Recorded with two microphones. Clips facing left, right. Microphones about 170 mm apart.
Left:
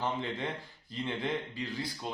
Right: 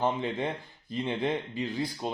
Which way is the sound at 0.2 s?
20° right (ahead or behind).